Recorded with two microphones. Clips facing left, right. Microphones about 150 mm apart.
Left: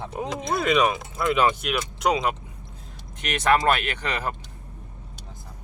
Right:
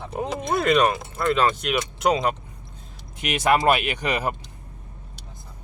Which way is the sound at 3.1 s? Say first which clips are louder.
Right 1 dB; 10° right (ahead or behind).